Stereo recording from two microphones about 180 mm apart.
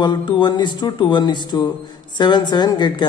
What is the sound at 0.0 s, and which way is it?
A man's voice, 25° left (ahead or behind).